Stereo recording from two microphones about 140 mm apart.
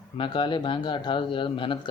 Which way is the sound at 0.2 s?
35° left (ahead or behind).